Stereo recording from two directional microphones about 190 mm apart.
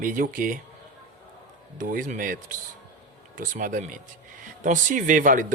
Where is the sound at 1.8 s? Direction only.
45° right (ahead or behind).